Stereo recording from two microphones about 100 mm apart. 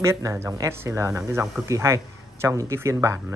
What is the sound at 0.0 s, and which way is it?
Speech, 30° right (ahead or behind).